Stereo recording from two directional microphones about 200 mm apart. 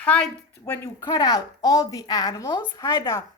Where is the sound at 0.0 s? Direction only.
5° left (ahead or behind).